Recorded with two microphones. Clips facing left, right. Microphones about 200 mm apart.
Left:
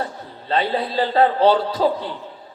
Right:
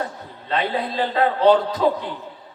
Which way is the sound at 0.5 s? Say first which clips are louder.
Left 2 dB; 30° left (ahead or behind).